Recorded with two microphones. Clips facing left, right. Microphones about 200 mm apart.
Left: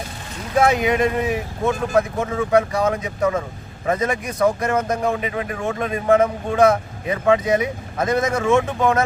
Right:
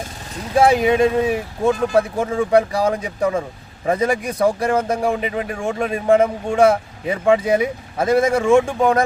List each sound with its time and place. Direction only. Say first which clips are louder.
0.5 s speech: right 3 dB; 30° right (ahead or behind)